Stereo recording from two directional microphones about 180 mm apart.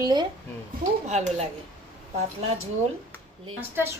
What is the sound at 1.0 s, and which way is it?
Speech, 40° right (ahead or behind).